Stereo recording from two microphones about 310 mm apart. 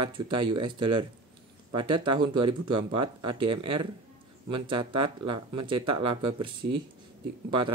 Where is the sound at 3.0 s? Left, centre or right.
Right.